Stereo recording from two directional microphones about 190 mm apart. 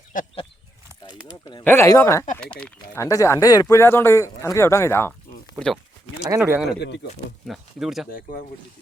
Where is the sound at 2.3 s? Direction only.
5° left (ahead or behind).